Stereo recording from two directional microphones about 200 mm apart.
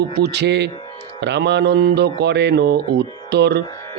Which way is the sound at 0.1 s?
55° right (ahead or behind).